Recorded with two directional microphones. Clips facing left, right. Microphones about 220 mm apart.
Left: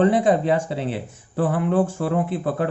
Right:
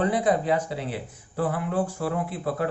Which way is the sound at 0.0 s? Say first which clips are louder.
Left 6 dB; 25° left (ahead or behind).